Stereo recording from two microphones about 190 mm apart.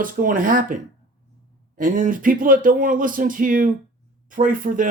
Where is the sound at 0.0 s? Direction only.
45° right (ahead or behind).